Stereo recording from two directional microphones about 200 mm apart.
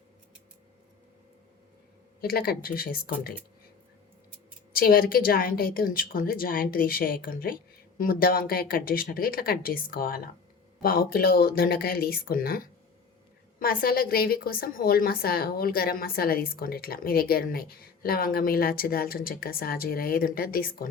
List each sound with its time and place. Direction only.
2.2 s a woman's voice: 50° left (ahead or behind)
4.7 s a woman's voice: 45° left (ahead or behind)